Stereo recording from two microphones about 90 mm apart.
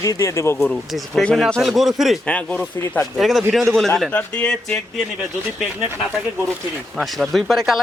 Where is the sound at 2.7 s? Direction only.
35° left (ahead or behind).